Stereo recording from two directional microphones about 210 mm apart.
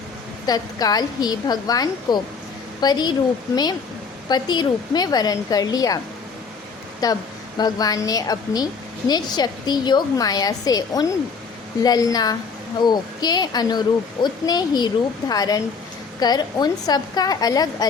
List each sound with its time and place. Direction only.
0.4 s a woman's voice: 20° left (ahead or behind)
7.0 s a woman's voice: 15° left (ahead or behind)